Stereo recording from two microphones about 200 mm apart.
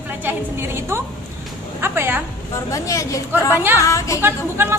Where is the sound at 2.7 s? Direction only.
15° left (ahead or behind).